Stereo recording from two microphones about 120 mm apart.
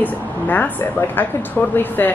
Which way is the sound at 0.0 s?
15° left (ahead or behind).